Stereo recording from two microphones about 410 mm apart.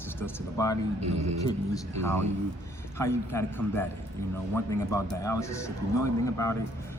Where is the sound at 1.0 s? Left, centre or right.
Right.